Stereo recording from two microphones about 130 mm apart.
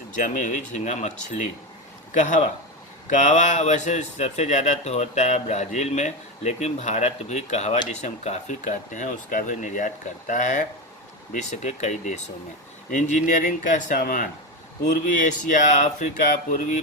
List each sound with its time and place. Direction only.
0.2 s speech: 75° left (ahead or behind)